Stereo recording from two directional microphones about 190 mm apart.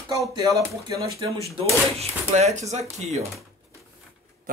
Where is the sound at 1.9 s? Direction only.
35° right (ahead or behind).